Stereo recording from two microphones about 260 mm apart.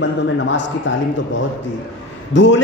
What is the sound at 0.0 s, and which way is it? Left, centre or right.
Speech, left.